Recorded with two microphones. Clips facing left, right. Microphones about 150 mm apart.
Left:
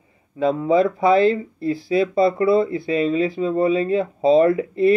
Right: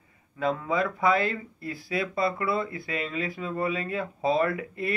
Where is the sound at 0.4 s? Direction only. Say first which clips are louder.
Left 9 dB; 25° left (ahead or behind).